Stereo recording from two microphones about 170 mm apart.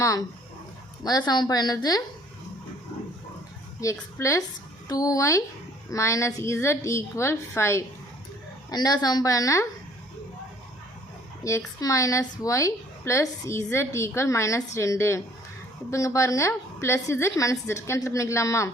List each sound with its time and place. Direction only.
0.0 s speech: 20° left (ahead or behind)
3.8 s a woman's voice: 20° left (ahead or behind)
11.4 s a woman's voice: 20° left (ahead or behind)